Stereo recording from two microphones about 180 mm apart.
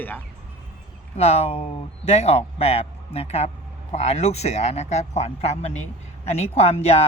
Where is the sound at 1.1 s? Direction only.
35° left (ahead or behind).